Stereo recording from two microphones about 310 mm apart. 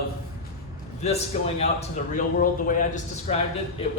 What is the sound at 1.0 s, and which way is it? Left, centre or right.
A man's voice, left.